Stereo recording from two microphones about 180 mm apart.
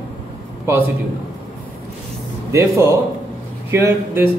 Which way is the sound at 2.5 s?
15° right (ahead or behind).